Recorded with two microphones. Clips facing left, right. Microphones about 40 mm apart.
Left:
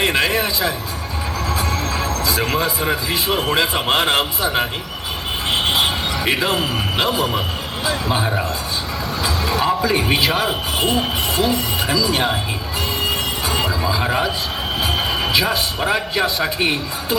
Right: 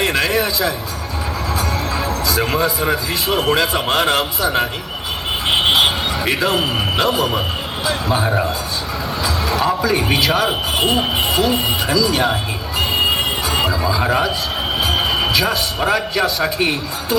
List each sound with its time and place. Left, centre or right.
0.0 s music: centre
1.7 s music: centre
2.6 s a man's voice: centre
5.5 s vehicle: right
6.2 s a man's voice: centre
7.9 s a man's voice: centre
9.2 s music: centre
10.5 s speech: right
11.9 s a man's voice: centre
12.8 s music: right
13.5 s a sound: centre
13.8 s a man's voice: centre
14.9 s a sound: centre
15.3 s a man's voice: centre